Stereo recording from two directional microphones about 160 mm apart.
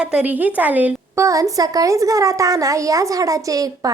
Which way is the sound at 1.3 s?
20° right (ahead or behind).